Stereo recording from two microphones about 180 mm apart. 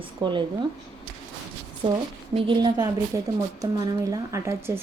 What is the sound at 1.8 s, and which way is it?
Speech, 35° right (ahead or behind).